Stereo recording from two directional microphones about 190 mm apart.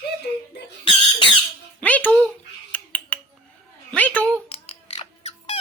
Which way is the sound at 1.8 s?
10° left (ahead or behind).